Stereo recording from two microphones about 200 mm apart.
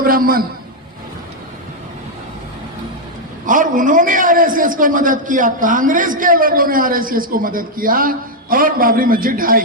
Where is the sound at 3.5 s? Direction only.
40° right (ahead or behind).